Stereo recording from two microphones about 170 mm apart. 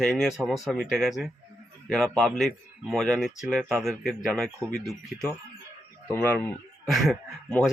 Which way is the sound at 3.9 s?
5° left (ahead or behind).